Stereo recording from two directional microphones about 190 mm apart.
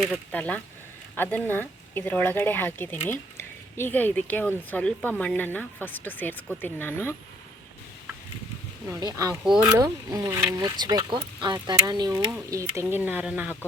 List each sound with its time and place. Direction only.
0.1 s speech: 5° left (ahead or behind)
8.9 s speech: 20° right (ahead or behind)
9.3 s speech: 5° right (ahead or behind)
9.6 s speech: 20° right (ahead or behind)